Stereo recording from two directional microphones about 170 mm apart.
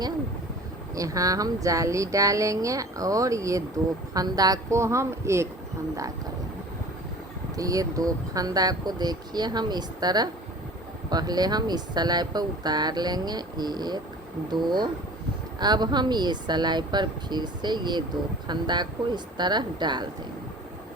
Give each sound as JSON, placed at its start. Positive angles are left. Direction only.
{"t": 0.9, "sound": "a woman's voice", "side_deg": -20}
{"t": 7.5, "sound": "speech", "side_deg": -20}